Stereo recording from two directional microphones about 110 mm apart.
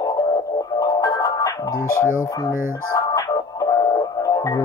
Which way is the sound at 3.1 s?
35° left (ahead or behind).